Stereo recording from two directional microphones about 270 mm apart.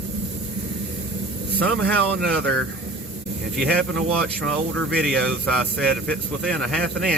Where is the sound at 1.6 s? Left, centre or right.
Centre.